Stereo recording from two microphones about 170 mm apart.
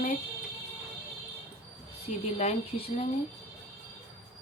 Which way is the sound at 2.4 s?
35° left (ahead or behind).